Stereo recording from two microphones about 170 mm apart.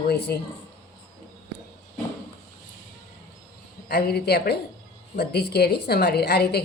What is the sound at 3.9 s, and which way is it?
Speech, 70° left (ahead or behind).